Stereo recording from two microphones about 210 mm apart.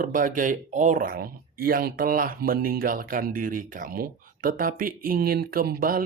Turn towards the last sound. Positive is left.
turn(degrees=-45)  # may be behind; listen again after turning